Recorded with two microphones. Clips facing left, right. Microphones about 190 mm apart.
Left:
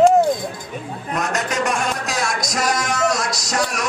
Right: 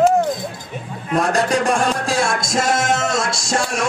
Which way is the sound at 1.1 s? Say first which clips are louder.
Right 6 dB; 30° right (ahead or behind).